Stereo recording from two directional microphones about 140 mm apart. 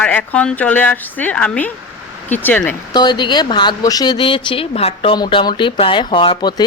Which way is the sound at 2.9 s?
30° left (ahead or behind).